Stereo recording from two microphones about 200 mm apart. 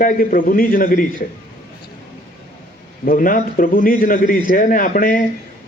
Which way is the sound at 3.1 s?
45° left (ahead or behind).